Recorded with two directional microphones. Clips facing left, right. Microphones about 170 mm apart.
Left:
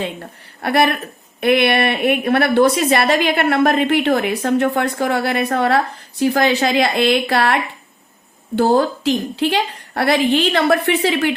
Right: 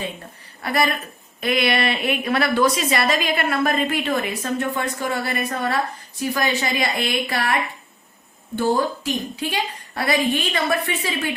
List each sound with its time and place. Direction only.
0.0 s a woman's voice: 65° left (ahead or behind)